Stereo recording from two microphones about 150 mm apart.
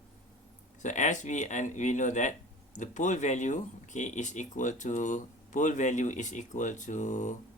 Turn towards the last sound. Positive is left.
turn(degrees=55)  # may be behind; listen again after turning